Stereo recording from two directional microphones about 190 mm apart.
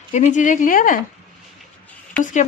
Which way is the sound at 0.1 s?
40° left (ahead or behind).